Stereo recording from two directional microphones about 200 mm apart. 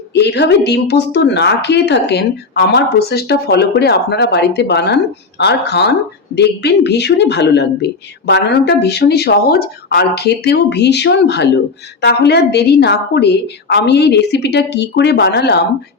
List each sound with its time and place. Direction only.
0.1 s speech: 55° left (ahead or behind)